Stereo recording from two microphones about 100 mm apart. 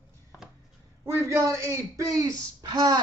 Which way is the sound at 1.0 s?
30° right (ahead or behind).